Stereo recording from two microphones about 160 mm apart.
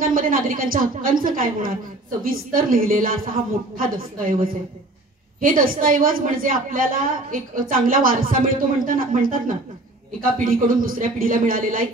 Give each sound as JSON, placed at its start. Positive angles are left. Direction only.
{"t": 0.0, "sound": "a woman's voice", "side_deg": -60}